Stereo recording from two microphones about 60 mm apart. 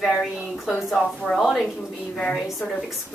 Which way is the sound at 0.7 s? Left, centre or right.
Centre.